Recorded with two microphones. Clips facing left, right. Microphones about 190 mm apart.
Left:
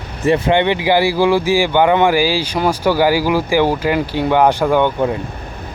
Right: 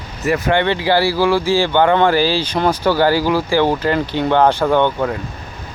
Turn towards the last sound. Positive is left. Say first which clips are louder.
# left 1 dB
turn(degrees=15)  # may be behind; listen again after turning